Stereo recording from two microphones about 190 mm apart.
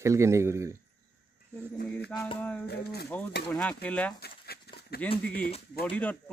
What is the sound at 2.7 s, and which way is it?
Speech, 55° left (ahead or behind).